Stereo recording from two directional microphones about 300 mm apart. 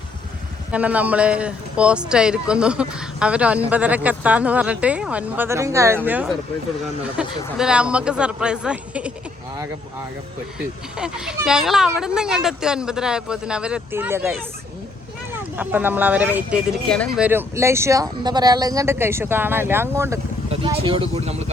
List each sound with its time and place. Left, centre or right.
0.7 s a man's voice: centre
10.9 s a man's voice: centre
20.5 s speech: centre